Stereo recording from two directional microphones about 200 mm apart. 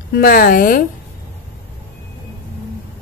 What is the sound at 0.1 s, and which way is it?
Speech, 45° left (ahead or behind).